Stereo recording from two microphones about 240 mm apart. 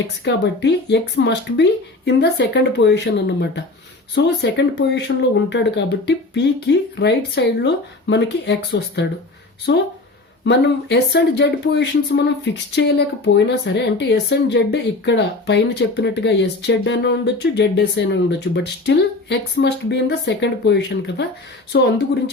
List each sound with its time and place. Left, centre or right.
0.3 s speech: left